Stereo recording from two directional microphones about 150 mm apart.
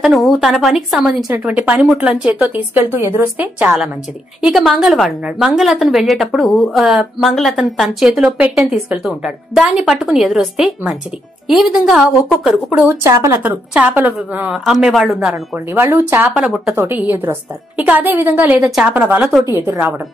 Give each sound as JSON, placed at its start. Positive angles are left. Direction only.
{"t": 0.0, "sound": "a woman's voice", "side_deg": 0}
{"t": 12.8, "sound": "a woman's voice", "side_deg": -20}
{"t": 14.4, "sound": "a woman's voice", "side_deg": 0}
{"t": 15.7, "sound": "a woman's voice", "side_deg": -15}